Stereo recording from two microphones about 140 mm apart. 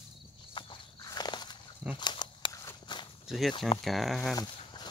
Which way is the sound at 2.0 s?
30° left (ahead or behind).